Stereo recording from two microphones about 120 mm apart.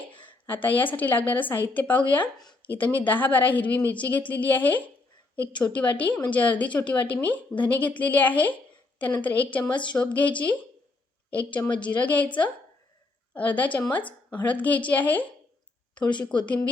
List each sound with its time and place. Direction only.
0.2 s a woman's voice: 15° left (ahead or behind)
2.5 s a sound: 15° left (ahead or behind)
3.1 s a woman's voice: 15° left (ahead or behind)
16.0 s speech: 40° left (ahead or behind)